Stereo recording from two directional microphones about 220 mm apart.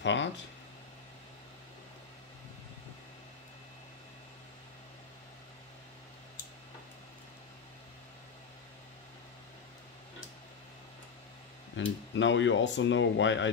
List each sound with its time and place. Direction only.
0.0 s speech: 55° left (ahead or behind)
11.7 s speech: 60° left (ahead or behind)